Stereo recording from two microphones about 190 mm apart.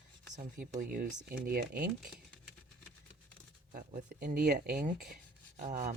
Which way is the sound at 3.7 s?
45° right (ahead or behind).